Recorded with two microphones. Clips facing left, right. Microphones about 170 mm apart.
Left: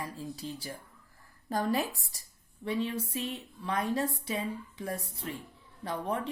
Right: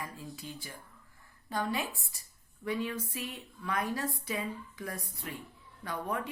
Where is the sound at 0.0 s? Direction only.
30° left (ahead or behind).